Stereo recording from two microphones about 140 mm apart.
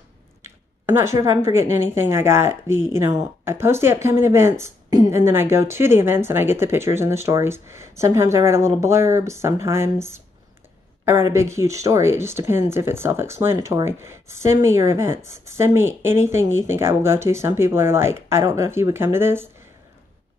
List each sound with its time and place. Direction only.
0.4 s speech: 20° right (ahead or behind)